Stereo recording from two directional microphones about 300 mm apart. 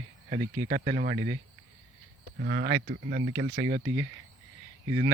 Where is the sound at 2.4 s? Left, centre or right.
Right.